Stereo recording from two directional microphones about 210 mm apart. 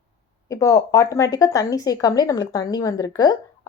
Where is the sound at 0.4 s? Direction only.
15° left (ahead or behind).